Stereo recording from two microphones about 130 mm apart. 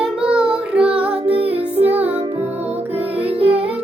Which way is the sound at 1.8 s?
10° right (ahead or behind).